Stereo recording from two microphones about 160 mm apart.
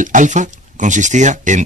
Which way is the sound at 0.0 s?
50° right (ahead or behind).